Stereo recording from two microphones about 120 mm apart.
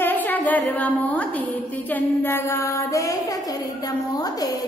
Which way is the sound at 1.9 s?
15° left (ahead or behind).